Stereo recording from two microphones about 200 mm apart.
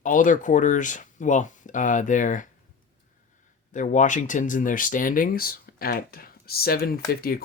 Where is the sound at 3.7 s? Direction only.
40° left (ahead or behind).